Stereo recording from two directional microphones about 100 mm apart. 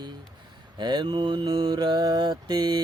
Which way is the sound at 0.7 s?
50° right (ahead or behind).